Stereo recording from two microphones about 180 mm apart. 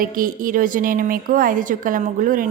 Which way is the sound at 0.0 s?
50° right (ahead or behind).